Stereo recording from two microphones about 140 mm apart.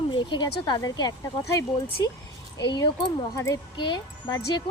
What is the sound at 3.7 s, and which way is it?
Speech, 35° left (ahead or behind).